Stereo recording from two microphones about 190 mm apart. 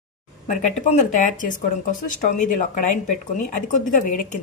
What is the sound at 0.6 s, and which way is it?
A woman's voice, 40° left (ahead or behind).